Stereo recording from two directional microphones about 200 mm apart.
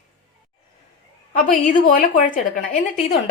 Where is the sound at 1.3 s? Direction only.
40° left (ahead or behind).